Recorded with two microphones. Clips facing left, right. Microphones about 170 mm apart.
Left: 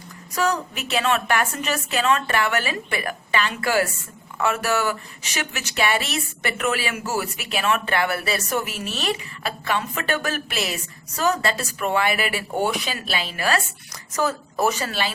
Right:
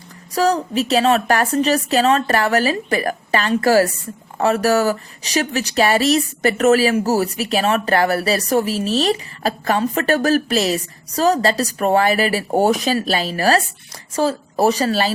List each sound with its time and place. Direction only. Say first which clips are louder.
0.3 s speech: right 7 dB; 35° right (ahead or behind)